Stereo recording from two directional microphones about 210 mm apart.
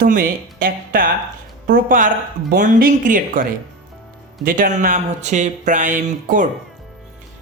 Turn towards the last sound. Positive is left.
turn(degrees=-40)  # may be behind; listen again after turning